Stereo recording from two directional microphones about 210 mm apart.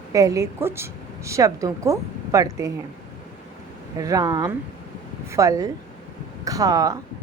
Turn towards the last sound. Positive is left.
turn(degrees=-15)  # may be behind; listen again after turning